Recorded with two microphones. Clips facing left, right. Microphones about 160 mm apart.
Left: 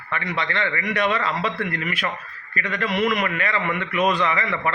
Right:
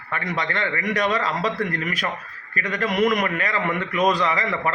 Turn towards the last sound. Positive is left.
turn(degrees=-35)  # may be behind; listen again after turning